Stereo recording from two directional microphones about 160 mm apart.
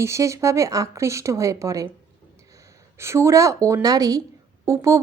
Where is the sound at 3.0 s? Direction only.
15° right (ahead or behind).